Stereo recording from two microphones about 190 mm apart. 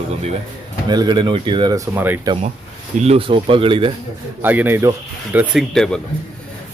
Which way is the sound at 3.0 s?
30° right (ahead or behind).